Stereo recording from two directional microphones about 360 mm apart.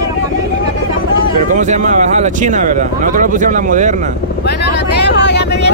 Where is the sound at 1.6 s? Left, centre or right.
Centre.